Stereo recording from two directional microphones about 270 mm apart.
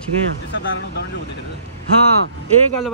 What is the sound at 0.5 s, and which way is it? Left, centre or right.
Speech, left.